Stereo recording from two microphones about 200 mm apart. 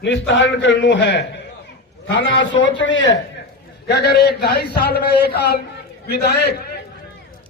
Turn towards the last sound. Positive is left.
turn(degrees=55)  # may be behind; listen again after turning